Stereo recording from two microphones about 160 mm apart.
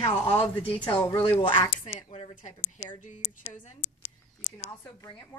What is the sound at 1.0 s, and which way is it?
Speech, 10° left (ahead or behind).